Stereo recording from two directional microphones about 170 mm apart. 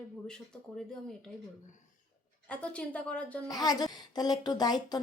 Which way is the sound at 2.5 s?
5° left (ahead or behind).